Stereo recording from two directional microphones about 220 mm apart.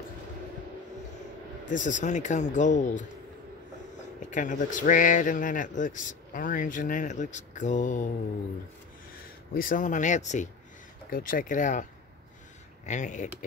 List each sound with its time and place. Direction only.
1.7 s a man's voice: 35° left (ahead or behind)
4.2 s a man's voice: 35° left (ahead or behind)
9.5 s a man's voice: 40° left (ahead or behind)
12.8 s a man's voice: 35° left (ahead or behind)